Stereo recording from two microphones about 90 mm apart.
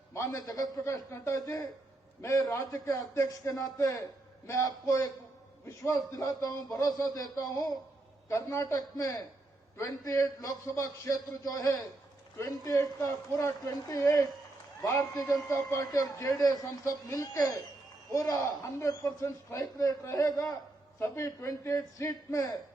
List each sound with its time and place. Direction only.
0.1 s a man's voice: 40° left (ahead or behind)
0.9 s a man's voice: 35° left (ahead or behind)
8.3 s a man's voice: 35° left (ahead or behind)
21.0 s speech: 30° left (ahead or behind)